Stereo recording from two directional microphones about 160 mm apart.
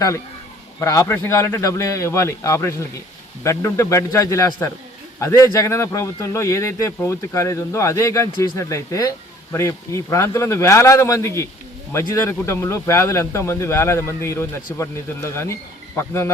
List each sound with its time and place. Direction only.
0.8 s a man's voice: 20° left (ahead or behind)